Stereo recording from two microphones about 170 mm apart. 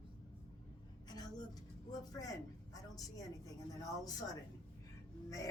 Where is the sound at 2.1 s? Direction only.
20° left (ahead or behind).